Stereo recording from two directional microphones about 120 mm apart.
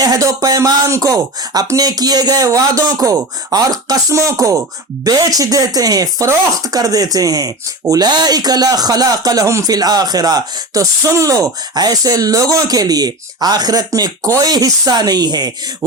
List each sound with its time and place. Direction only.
0.0 s speech: 30° right (ahead or behind)